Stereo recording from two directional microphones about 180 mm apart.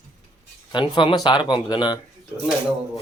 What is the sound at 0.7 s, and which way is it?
Speech, 25° left (ahead or behind).